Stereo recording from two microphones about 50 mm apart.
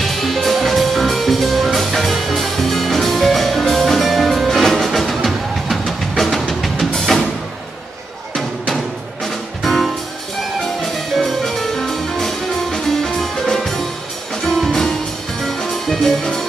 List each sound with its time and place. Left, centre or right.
0.0 s music: centre
8.4 s music: centre